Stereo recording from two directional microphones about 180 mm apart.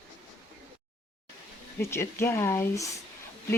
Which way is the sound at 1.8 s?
15° left (ahead or behind).